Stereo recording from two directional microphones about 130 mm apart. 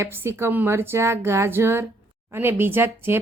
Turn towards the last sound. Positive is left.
turn(degrees=-20)  # may be behind; listen again after turning